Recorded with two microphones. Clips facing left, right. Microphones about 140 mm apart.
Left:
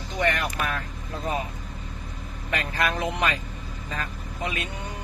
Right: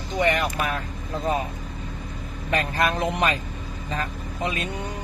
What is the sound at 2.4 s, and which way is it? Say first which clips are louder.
Speech: right 4 dB; 30° right (ahead or behind).